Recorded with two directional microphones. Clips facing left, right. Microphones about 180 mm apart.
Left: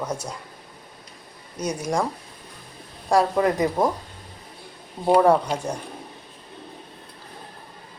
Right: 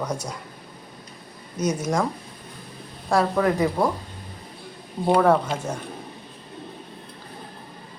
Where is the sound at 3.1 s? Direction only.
15° left (ahead or behind).